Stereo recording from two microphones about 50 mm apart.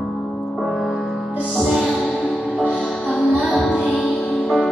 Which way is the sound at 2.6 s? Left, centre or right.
Left.